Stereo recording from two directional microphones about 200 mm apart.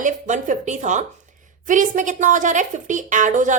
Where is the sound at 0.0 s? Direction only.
40° right (ahead or behind).